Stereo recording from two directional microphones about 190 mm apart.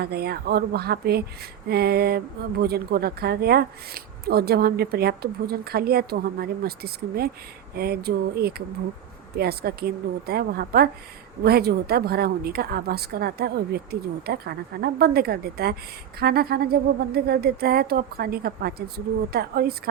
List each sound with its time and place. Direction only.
0.0 s speech: 55° right (ahead or behind)